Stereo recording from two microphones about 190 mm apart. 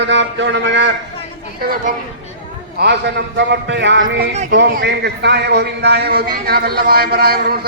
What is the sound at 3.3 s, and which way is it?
A man's voice, 65° right (ahead or behind).